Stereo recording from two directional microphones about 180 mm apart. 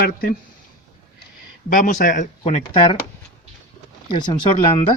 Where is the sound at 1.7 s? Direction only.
50° left (ahead or behind); by 2.9 s 30° left (ahead or behind).